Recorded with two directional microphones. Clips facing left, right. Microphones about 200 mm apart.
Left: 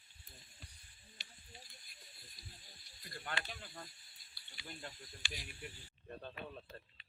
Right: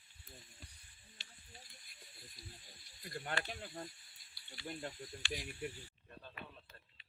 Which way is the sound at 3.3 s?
35° right (ahead or behind).